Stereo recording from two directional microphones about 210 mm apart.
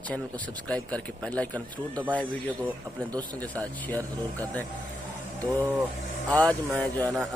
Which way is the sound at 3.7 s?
10° left (ahead or behind).